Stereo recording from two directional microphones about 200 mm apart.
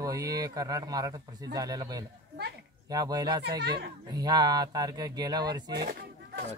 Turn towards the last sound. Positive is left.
turn(degrees=-55)  # may be behind; listen again after turning